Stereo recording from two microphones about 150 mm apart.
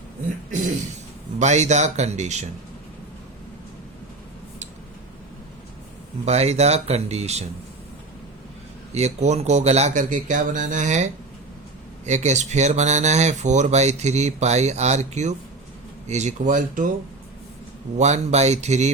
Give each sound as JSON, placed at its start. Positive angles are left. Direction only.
{"t": 1.4, "sound": "speech", "side_deg": -50}
{"t": 6.2, "sound": "speech", "side_deg": -45}
{"t": 8.9, "sound": "speech", "side_deg": -45}
{"t": 17.9, "sound": "speech", "side_deg": -50}